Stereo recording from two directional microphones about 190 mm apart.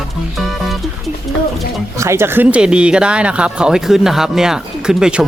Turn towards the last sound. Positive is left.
turn(degrees=-5)  # may be behind; listen again after turning